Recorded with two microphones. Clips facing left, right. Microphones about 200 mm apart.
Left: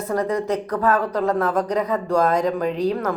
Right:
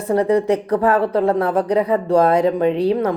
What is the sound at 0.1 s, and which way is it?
Speech, 30° right (ahead or behind).